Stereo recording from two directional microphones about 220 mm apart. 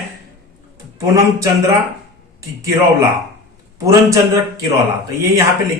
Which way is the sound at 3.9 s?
15° right (ahead or behind).